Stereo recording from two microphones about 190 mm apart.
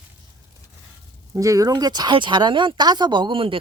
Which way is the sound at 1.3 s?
15° right (ahead or behind).